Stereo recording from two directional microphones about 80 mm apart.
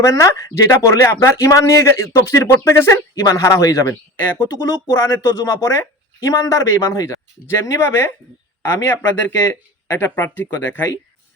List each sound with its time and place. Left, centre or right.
0.0 s a man's voice: left
3.2 s a man's voice: left